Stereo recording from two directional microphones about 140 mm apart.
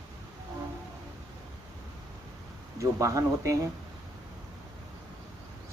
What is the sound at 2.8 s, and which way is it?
Speech, 20° right (ahead or behind).